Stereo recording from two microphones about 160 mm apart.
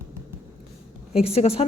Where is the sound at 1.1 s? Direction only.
40° left (ahead or behind).